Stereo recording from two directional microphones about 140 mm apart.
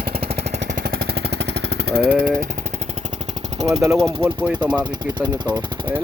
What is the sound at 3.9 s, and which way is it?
Speech, 5° left (ahead or behind).